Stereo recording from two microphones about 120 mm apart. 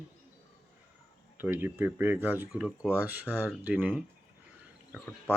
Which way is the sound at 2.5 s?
5° right (ahead or behind).